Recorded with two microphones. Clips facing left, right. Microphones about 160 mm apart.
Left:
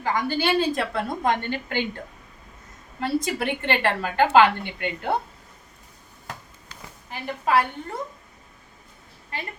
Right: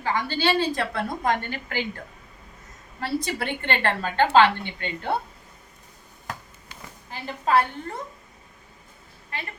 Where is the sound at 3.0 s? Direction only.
20° left (ahead or behind).